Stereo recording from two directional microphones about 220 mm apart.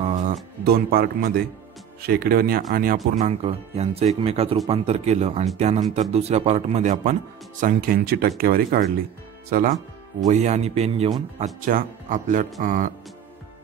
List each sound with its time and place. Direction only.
0.0 s speech: 35° right (ahead or behind)
11.3 s speech: 35° right (ahead or behind)